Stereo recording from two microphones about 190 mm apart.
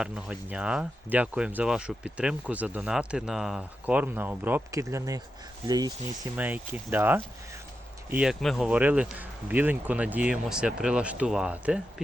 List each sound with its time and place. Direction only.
0.0 s speech: 5° right (ahead or behind); by 5.9 s 20° right (ahead or behind)
6.3 s speech: 10° right (ahead or behind)